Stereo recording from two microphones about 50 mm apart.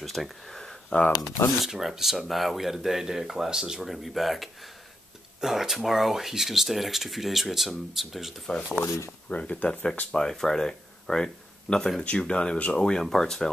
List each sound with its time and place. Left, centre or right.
0.0 s speech: centre
1.6 s speech: centre
8.8 s speech: left
9.3 s speech: left
10.1 s speech: centre